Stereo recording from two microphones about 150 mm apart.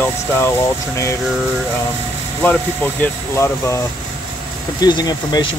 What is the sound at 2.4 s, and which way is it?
Speech, 10° left (ahead or behind).